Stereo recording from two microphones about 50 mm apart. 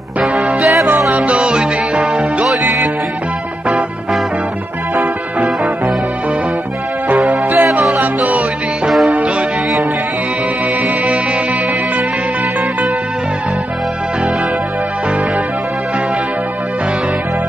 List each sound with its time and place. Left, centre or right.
0.5 s music: centre
1.1 s music: right
7.2 s music: right